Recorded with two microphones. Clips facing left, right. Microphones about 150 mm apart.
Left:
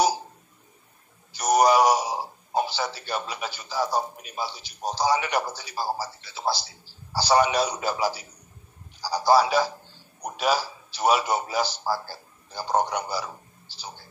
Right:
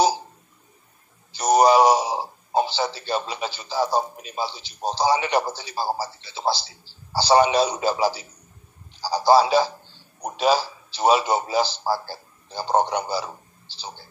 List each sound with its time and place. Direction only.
1.3 s a man's voice: 25° right (ahead or behind)